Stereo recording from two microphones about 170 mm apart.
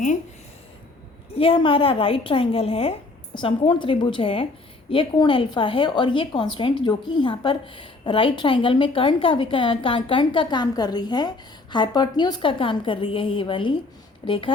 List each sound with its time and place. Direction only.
1.4 s a woman's voice: 30° left (ahead or behind)